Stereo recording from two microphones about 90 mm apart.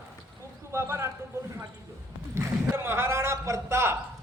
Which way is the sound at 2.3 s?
30° right (ahead or behind).